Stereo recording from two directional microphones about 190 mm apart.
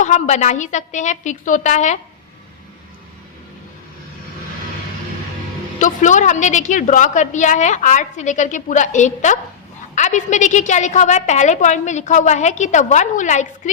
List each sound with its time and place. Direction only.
0.0 s a woman's voice: 40° left (ahead or behind)
5.8 s a woman's voice: 40° left (ahead or behind)